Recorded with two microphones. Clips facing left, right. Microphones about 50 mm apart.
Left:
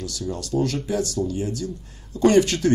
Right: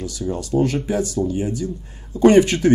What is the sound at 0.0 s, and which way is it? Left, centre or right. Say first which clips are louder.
Speech: right 4 dB; right.